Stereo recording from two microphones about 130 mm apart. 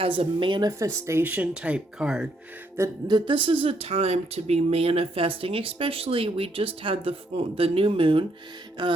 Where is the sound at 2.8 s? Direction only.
35° right (ahead or behind).